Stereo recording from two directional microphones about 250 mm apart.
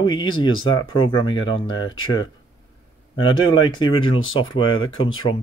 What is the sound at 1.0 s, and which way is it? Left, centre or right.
Speech, left.